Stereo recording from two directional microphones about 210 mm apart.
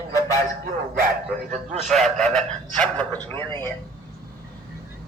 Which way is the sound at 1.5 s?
35° right (ahead or behind).